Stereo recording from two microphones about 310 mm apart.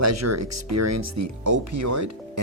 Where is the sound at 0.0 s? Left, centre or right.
Right.